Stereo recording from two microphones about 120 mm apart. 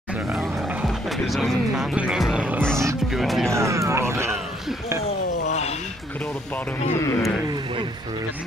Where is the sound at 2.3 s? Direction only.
15° right (ahead or behind).